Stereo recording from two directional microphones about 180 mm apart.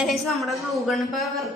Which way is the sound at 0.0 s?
Centre (ahead or behind).